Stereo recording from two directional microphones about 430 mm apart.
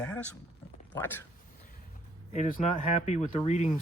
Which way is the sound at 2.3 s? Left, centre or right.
Centre.